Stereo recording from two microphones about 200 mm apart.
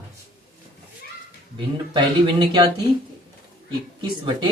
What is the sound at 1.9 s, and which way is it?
Speech, 20° right (ahead or behind).